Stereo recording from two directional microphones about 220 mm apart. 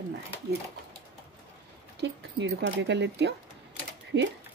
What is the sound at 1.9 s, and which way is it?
Speech, 50° right (ahead or behind).